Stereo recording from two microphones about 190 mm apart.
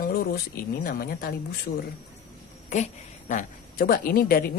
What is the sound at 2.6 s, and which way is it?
A woman's voice, 40° left (ahead or behind).